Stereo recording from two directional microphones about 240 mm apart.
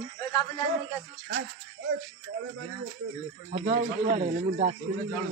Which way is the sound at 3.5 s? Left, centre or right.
Right.